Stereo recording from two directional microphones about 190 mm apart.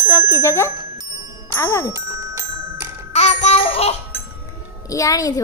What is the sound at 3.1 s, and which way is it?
Music, 35° left (ahead or behind).